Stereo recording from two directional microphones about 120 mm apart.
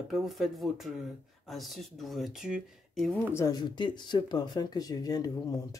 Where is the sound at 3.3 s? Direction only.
30° left (ahead or behind).